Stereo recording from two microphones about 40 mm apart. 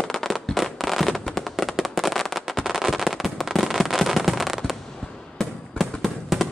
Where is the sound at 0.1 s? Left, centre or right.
Centre.